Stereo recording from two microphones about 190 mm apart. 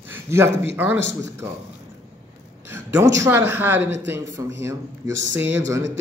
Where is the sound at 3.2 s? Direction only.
10° right (ahead or behind).